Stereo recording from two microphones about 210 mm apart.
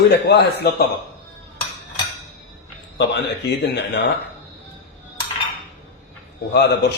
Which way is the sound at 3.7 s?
55° left (ahead or behind).